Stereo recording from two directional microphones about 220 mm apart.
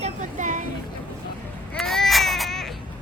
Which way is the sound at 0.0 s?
35° right (ahead or behind).